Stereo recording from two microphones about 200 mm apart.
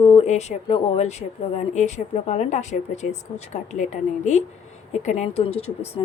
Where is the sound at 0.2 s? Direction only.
35° left (ahead or behind).